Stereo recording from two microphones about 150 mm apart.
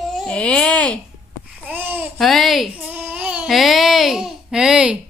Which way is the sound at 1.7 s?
10° right (ahead or behind).